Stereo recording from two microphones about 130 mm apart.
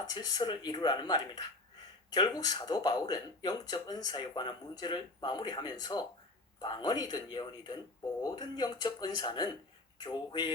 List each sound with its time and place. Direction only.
0.1 s speech: 30° left (ahead or behind)